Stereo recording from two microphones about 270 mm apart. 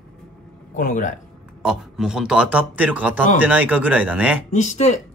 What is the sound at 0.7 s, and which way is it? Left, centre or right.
Speech, left.